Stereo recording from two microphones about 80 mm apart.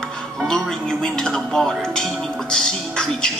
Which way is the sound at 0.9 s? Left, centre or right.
Centre.